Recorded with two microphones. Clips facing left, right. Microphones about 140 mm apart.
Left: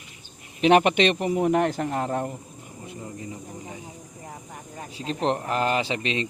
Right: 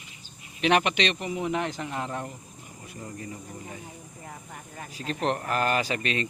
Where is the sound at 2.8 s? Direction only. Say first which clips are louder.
Left 2 dB; 20° left (ahead or behind).